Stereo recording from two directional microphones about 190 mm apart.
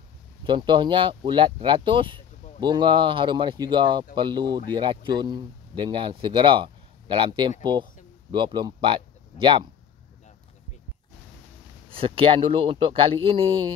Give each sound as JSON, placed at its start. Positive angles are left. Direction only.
{"t": 0.5, "sound": "speech", "side_deg": -25}
{"t": 11.9, "sound": "speech", "side_deg": -30}